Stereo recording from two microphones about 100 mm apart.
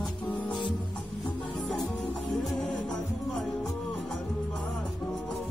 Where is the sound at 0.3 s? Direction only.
15° left (ahead or behind).